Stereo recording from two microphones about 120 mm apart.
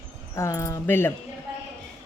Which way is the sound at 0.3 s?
25° left (ahead or behind).